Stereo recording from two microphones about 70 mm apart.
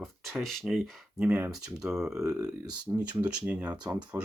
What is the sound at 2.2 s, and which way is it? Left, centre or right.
Speech, right.